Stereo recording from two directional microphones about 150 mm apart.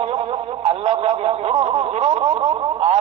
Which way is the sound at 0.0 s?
40° right (ahead or behind).